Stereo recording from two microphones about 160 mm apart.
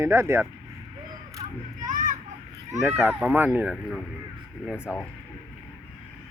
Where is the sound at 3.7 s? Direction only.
Centre (ahead or behind).